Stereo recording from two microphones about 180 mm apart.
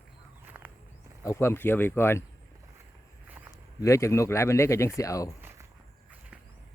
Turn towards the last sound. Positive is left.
turn(degrees=-10)  # may be behind; listen again after turning